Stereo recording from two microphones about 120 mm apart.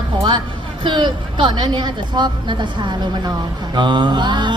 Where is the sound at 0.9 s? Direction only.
40° right (ahead or behind).